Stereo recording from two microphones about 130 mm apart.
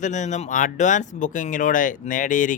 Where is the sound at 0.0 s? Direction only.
70° left (ahead or behind).